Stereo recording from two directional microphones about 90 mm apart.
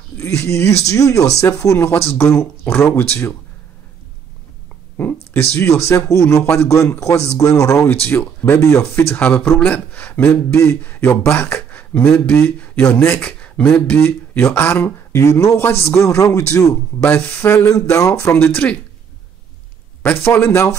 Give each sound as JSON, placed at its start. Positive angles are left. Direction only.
{"t": 0.2, "sound": "speech", "side_deg": 30}
{"t": 4.9, "sound": "speech", "side_deg": 20}
{"t": 10.5, "sound": "speech", "side_deg": 30}
{"t": 13.4, "sound": "speech", "side_deg": 15}
{"t": 17.1, "sound": "speech", "side_deg": 25}
{"t": 17.6, "sound": "speech", "side_deg": 40}
{"t": 20.3, "sound": "speech", "side_deg": 30}